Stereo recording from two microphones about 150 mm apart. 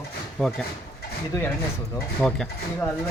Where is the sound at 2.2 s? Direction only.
5° left (ahead or behind).